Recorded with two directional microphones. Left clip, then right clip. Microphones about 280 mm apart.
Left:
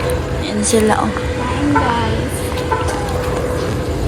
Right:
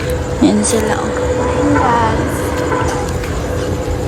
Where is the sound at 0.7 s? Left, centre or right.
Centre.